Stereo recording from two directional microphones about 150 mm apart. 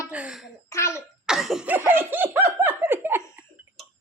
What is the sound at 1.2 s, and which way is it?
Laughter, centre (ahead or behind).